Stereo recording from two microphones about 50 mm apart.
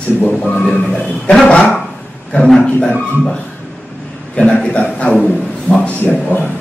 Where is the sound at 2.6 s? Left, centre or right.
Left.